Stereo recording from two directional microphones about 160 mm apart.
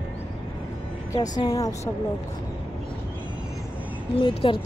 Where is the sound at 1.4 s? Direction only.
20° left (ahead or behind).